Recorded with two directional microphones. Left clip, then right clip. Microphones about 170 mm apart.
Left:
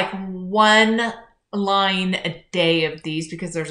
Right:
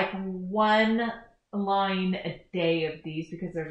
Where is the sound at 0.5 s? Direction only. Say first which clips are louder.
Left 8 dB; 20° left (ahead or behind).